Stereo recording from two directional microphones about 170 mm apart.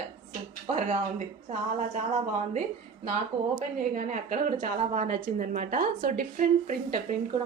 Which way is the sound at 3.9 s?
50° right (ahead or behind).